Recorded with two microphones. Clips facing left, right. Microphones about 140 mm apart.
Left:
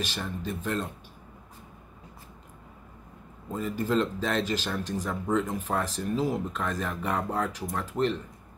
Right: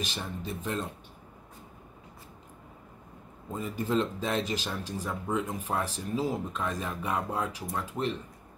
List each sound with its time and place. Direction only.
0.1 s speech: 15° right (ahead or behind)
3.6 s speech: 15° right (ahead or behind)